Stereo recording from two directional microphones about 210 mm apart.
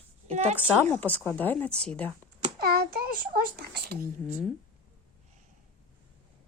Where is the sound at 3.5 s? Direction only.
50° right (ahead or behind).